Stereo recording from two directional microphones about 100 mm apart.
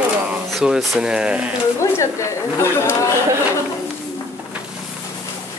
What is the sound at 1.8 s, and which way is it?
Speech, 30° left (ahead or behind).